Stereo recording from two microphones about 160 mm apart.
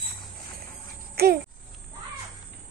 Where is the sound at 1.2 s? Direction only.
75° right (ahead or behind).